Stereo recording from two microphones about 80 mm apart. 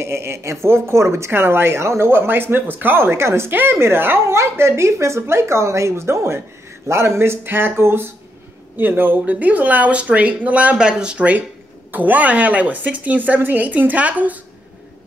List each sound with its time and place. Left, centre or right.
0.0 s speech: right